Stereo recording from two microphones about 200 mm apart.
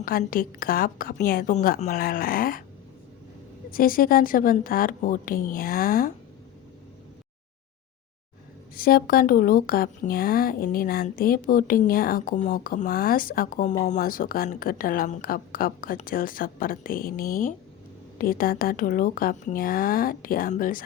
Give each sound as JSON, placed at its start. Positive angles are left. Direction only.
{"t": 0.0, "sound": "speech", "side_deg": 45}
{"t": 3.7, "sound": "speech", "side_deg": 45}
{"t": 8.7, "sound": "speech", "side_deg": 45}